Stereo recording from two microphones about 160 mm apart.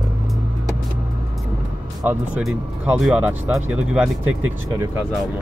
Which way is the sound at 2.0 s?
10° right (ahead or behind).